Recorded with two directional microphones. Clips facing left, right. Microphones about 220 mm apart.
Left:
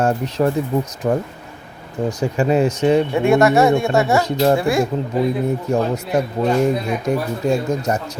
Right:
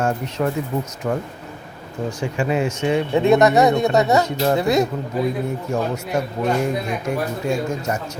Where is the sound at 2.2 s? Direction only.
40° left (ahead or behind).